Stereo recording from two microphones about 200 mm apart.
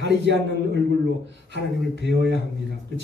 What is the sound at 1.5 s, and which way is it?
Speech, 60° right (ahead or behind).